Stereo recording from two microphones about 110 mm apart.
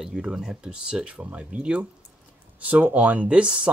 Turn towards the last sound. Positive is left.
turn(degrees=-10)  # may be behind; listen again after turning